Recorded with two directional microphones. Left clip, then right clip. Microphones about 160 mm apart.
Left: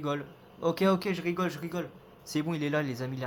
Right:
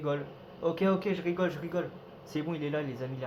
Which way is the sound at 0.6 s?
65° left (ahead or behind).